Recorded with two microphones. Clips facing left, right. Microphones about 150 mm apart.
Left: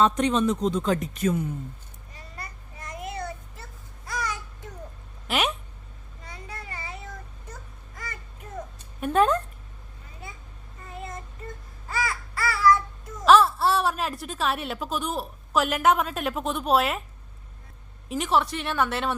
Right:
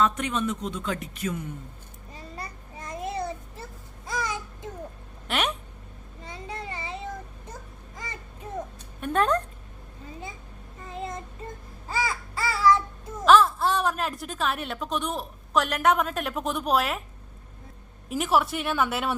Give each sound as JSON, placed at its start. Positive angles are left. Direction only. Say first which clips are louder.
{"t": 0.0, "sound": "speech", "louder": "left 4 dB", "side_deg": 30}
{"t": 2.1, "sound": "a sound", "louder": "right 3 dB", "side_deg": -30}
{"t": 6.2, "sound": "a sound", "louder": "right 4 dB", "side_deg": -25}
{"t": 9.0, "sound": "speech", "louder": "left 2 dB", "side_deg": 5}
{"t": 10.8, "sound": "child singing", "louder": "right 3 dB", "side_deg": -20}
{"t": 11.9, "sound": "babbling", "louder": "right 1 dB", "side_deg": -30}
{"t": 13.2, "sound": "speech", "louder": "left 1 dB", "side_deg": 5}
{"t": 18.1, "sound": "speech", "louder": "even", "side_deg": -5}